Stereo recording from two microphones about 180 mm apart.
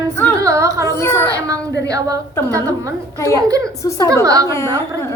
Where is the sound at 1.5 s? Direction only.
20° right (ahead or behind).